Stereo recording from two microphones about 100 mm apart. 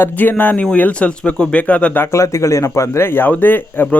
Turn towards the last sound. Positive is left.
turn(degrees=20)  # may be behind; listen again after turning